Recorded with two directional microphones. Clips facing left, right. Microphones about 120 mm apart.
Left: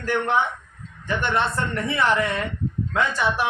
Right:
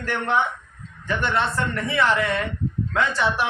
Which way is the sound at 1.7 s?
20° left (ahead or behind).